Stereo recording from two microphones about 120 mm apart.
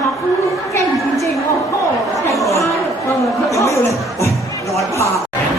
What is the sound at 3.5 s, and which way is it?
Speech, 25° left (ahead or behind).